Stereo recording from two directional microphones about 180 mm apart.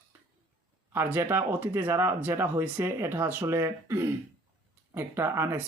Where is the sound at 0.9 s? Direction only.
10° right (ahead or behind).